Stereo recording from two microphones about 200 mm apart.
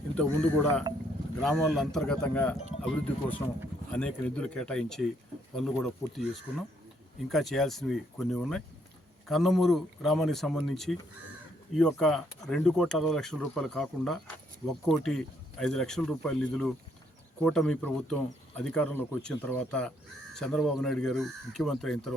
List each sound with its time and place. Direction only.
0.2 s speech: 5° left (ahead or behind)
7.3 s speech: centre (ahead or behind)